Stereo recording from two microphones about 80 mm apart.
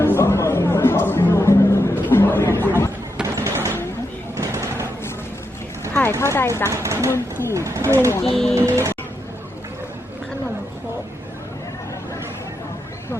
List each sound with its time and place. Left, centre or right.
0.0 s music: left
3.2 s a sound: right
5.9 s a sound: left
6.7 s speech: right
7.1 s speech: left
7.5 s speech: right
8.2 s speech: centre
8.5 s speech: right